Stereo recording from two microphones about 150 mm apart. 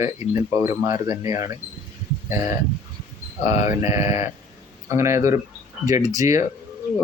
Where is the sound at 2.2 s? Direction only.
20° right (ahead or behind).